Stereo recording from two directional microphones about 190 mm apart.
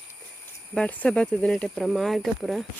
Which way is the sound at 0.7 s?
5° left (ahead or behind).